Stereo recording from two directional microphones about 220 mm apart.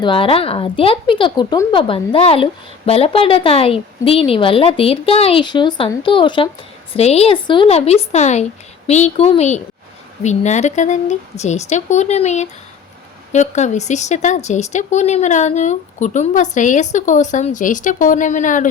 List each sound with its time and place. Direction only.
0.0 s a woman's voice: 25° left (ahead or behind)